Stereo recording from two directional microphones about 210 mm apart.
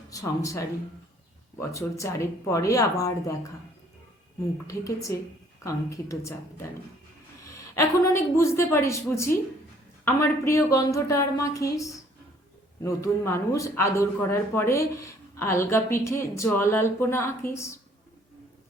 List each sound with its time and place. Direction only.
0.1 s speech: 15° left (ahead or behind)
4.6 s speech: 15° left (ahead or behind)
7.8 s speech: 15° left (ahead or behind)